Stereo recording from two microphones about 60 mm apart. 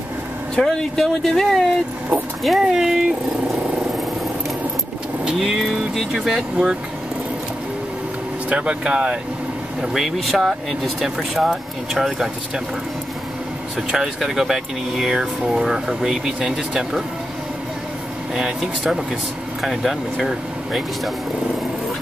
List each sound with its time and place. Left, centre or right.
0.6 s speech: centre
5.2 s speech: centre
8.5 s speech: centre
9.8 s speech: centre
13.7 s speech: centre
18.3 s speech: centre